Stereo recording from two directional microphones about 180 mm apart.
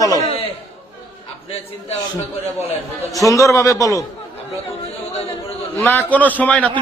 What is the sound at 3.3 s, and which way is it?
Speech, 15° left (ahead or behind).